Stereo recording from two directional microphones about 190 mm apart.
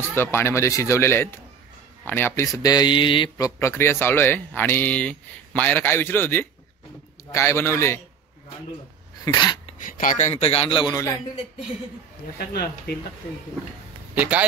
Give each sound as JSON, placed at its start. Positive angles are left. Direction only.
{"t": 0.0, "sound": "speech", "side_deg": 10}
{"t": 9.2, "sound": "a sound", "side_deg": 20}
{"t": 9.8, "sound": "a man's voice", "side_deg": 45}
{"t": 12.4, "sound": "speech", "side_deg": 60}
{"t": 14.1, "sound": "a man's voice", "side_deg": -10}